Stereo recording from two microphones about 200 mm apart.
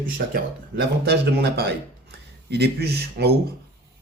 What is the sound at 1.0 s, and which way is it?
Speech, 55° right (ahead or behind).